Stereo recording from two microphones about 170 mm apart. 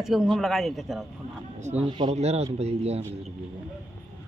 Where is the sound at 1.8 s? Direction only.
30° right (ahead or behind).